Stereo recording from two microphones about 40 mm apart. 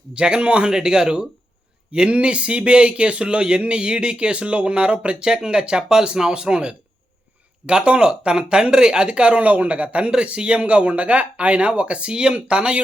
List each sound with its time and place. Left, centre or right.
0.1 s speech: right
9.4 s speech: right